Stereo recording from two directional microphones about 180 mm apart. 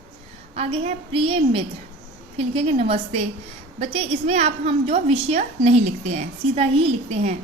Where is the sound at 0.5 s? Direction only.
35° right (ahead or behind).